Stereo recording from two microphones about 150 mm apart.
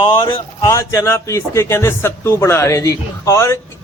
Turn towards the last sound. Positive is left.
turn(degrees=20)  # may be behind; listen again after turning